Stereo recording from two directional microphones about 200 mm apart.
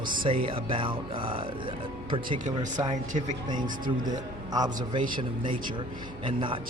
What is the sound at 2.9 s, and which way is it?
Speech, 40° right (ahead or behind).